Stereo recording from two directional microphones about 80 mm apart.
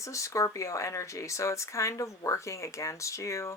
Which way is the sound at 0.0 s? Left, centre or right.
Left.